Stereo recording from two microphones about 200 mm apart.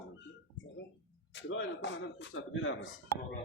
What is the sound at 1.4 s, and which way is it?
Speech, 70° left (ahead or behind).